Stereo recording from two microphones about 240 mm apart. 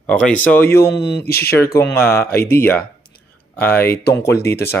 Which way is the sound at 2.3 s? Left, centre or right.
Left.